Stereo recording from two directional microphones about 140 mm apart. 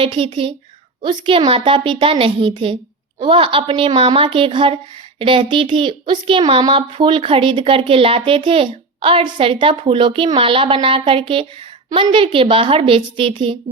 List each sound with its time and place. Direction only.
0.0 s speech: 40° right (ahead or behind)